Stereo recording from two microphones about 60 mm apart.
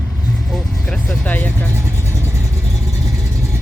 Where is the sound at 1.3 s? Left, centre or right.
Left.